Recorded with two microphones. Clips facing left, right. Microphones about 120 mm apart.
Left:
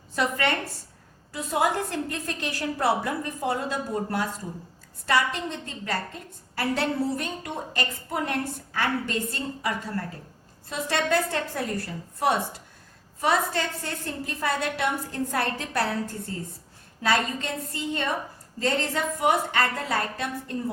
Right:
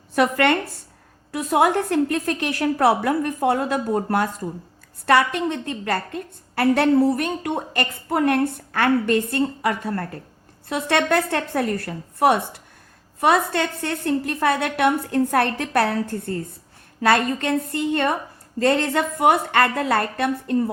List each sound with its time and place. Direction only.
0.2 s a woman's voice: 65° right (ahead or behind)